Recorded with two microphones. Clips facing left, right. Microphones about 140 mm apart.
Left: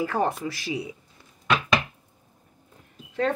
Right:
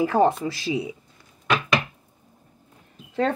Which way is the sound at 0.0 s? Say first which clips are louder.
Right 6 dB; 20° right (ahead or behind).